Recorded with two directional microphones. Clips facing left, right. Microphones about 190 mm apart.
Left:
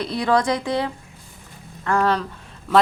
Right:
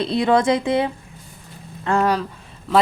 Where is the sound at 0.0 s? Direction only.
25° right (ahead or behind).